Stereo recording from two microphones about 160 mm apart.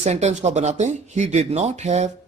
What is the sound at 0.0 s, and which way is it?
Speech, 45° right (ahead or behind).